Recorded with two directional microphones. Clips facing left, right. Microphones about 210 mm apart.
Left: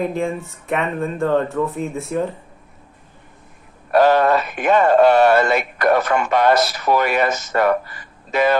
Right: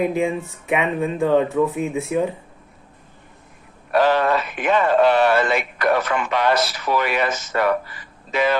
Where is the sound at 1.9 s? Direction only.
15° right (ahead or behind).